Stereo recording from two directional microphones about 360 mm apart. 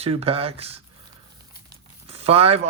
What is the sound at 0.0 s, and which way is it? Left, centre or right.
Speech, centre.